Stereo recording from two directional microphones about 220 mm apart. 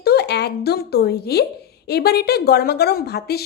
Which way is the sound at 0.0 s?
45° left (ahead or behind).